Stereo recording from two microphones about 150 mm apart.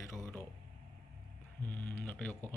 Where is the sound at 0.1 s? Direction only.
15° left (ahead or behind).